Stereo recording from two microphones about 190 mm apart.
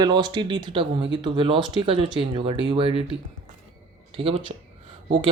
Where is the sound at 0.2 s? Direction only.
25° right (ahead or behind).